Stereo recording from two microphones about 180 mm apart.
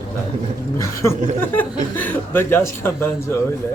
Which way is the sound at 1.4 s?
10° left (ahead or behind).